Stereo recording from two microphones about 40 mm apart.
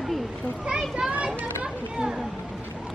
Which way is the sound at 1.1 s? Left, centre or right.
Right.